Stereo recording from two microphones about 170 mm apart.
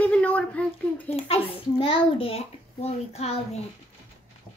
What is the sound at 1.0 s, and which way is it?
A child's voice, 35° left (ahead or behind).